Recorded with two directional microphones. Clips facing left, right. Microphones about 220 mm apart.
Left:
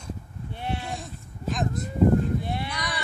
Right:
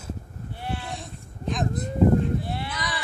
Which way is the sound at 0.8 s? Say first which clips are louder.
Left 1 dB; centre (ahead or behind).